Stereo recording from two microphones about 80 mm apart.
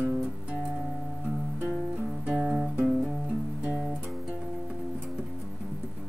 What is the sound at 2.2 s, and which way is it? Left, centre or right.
Guitar, centre.